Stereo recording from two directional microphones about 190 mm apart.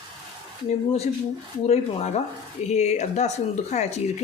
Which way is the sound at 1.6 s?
35° left (ahead or behind).